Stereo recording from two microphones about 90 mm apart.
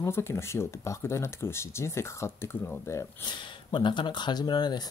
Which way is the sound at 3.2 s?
60° left (ahead or behind).